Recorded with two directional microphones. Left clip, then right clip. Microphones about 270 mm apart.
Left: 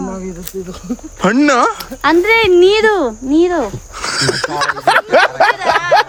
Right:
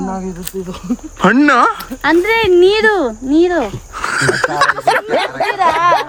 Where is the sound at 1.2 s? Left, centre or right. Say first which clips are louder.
Right 1 dB; centre.